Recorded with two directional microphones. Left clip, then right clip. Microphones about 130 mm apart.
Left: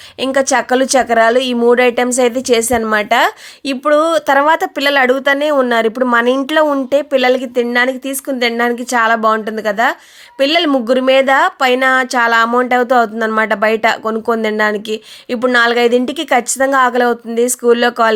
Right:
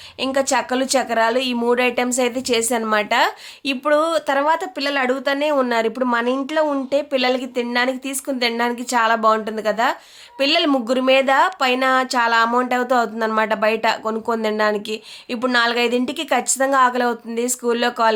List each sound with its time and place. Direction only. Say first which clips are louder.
0.2 s speech: left 6 dB; 45° left (ahead or behind); by 6.7 s 60° left (ahead or behind)
6.7 s speech: left 7 dB; 45° left (ahead or behind)